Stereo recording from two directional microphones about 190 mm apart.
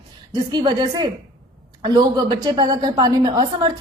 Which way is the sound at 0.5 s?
25° right (ahead or behind).